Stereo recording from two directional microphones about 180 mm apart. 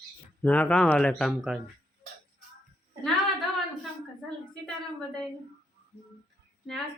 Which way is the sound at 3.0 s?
Centre (ahead or behind).